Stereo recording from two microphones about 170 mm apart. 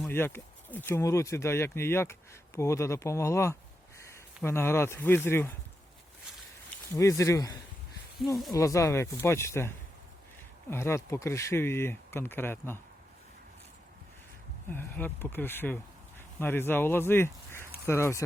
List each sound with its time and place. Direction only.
0.1 s speech: 15° left (ahead or behind)
6.9 s speech: 20° left (ahead or behind)
14.7 s speech: 10° left (ahead or behind)